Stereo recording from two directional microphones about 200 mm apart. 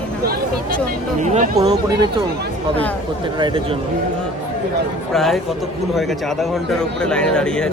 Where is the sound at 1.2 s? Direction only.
35° right (ahead or behind).